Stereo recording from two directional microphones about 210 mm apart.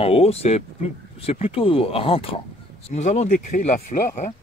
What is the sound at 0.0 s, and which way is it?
Speech, 30° left (ahead or behind).